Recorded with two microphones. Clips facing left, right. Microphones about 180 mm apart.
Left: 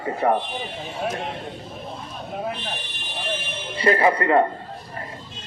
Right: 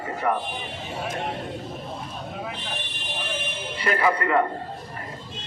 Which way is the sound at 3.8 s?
30° left (ahead or behind).